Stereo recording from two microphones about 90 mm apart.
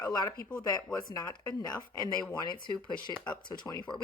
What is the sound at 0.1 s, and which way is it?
Speech, 45° left (ahead or behind).